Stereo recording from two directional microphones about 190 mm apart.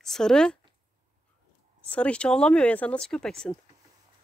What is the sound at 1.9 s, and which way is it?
Speech, 5° left (ahead or behind).